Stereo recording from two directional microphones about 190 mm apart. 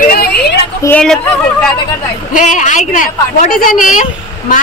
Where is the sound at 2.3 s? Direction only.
40° left (ahead or behind).